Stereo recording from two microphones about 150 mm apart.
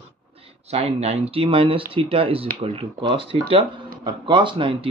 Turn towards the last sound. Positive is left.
turn(degrees=-35)  # may be behind; listen again after turning